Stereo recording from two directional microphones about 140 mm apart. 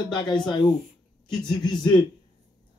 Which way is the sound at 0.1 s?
30° left (ahead or behind).